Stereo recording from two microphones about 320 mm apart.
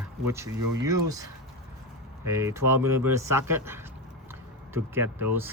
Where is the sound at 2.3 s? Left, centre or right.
Centre.